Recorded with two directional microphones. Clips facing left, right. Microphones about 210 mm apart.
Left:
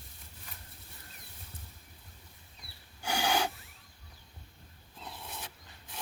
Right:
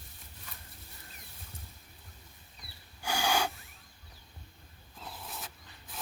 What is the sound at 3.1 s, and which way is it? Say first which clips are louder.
Snort: even; 20° left (ahead or behind).